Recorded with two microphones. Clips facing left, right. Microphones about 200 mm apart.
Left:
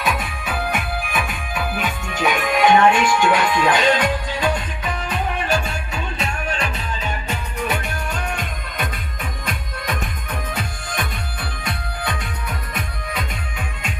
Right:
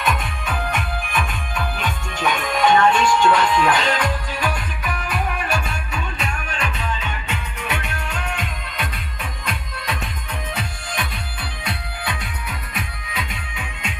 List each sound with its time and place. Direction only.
0.0 s music: 5° left (ahead or behind); by 10.0 s 45° left (ahead or behind)
11.6 s music: 45° left (ahead or behind)